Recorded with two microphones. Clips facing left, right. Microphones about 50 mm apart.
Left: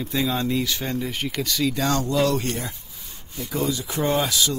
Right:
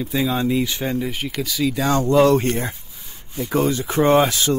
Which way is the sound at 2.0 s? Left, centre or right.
Right.